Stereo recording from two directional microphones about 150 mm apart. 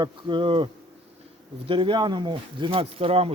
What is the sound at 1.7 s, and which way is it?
Speech, 35° right (ahead or behind).